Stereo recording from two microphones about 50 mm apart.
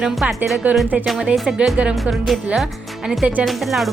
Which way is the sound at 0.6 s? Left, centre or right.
Right.